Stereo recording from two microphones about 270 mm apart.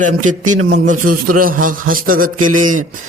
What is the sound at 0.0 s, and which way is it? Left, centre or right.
A man's voice, right.